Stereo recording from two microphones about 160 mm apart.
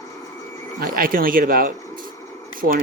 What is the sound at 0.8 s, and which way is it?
Speech, 65° right (ahead or behind).